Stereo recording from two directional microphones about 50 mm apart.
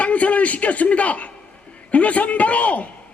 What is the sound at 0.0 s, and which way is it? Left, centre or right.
A man's voice, left.